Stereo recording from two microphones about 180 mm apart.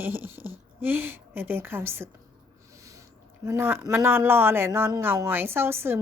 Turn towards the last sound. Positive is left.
turn(degrees=-15)  # may be behind; listen again after turning